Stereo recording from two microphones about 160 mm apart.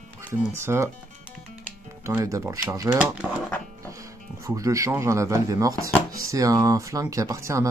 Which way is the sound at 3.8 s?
20° right (ahead or behind).